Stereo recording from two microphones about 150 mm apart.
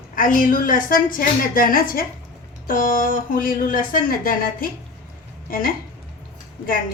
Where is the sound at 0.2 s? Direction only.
65° left (ahead or behind).